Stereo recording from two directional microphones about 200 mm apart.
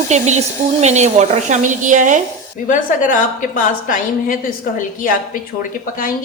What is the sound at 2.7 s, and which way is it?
A woman's voice, 40° left (ahead or behind).